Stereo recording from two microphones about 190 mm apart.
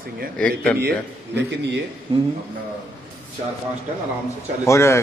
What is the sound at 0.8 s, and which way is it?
Speech, 65° right (ahead or behind).